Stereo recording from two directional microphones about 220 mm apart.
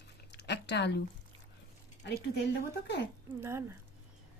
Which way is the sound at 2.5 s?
50° left (ahead or behind).